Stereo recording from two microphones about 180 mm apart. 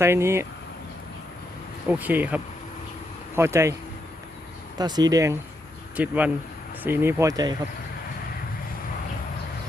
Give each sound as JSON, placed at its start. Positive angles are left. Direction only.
{"t": 0.0, "sound": "speech", "side_deg": -15}
{"t": 1.9, "sound": "speech", "side_deg": -10}
{"t": 4.8, "sound": "speech", "side_deg": -20}